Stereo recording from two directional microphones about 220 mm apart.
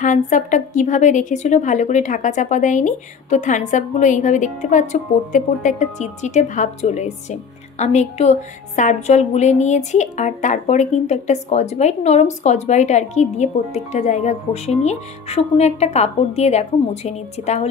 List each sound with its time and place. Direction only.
0.0 s a woman's voice: 35° left (ahead or behind)